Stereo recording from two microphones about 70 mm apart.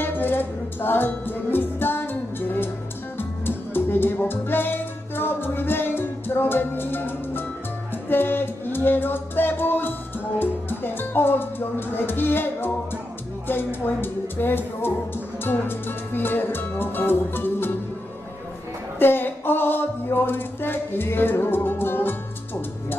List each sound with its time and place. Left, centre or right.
0.0 s music: left
13.5 s speech: left
18.9 s a sound: left